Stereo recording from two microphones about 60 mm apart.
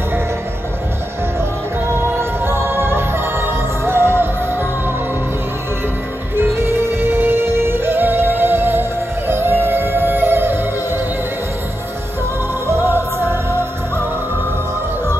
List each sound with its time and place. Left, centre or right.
2.0 s music: right
6.3 s music: right
12.6 s music: right